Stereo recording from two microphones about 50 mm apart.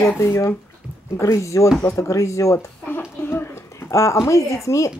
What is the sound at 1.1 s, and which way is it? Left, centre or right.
Speech, left.